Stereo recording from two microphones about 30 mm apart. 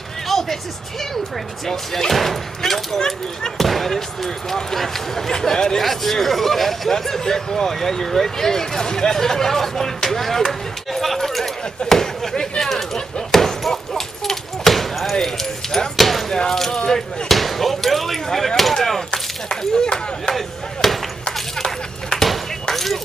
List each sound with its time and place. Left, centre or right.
0.3 s music: centre
1.7 s speech: centre
5.8 s speech: centre
13.3 s a sound: centre
15.2 s speech: centre
16.3 s speech: left
16.5 s speech: centre
19.5 s speech: left
20.3 s breaking: centre
22.1 s a sound: left
22.7 s a sound: centre